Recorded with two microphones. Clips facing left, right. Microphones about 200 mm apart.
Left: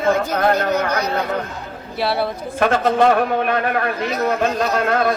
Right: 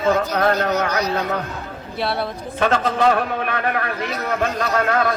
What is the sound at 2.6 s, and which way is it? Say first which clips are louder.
Speech: left 2 dB; 55° left (ahead or behind).